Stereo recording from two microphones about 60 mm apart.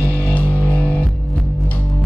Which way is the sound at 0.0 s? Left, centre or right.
Left.